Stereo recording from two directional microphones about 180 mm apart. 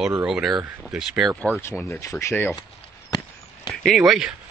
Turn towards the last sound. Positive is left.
turn(degrees=-5)  # may be behind; listen again after turning